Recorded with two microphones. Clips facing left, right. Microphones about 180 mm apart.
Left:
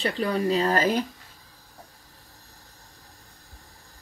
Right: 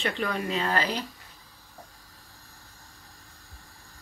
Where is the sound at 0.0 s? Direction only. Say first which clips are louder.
Left 4 dB; 35° left (ahead or behind).